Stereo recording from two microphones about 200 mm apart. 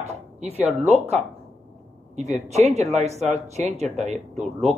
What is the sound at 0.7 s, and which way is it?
Speech, 30° right (ahead or behind).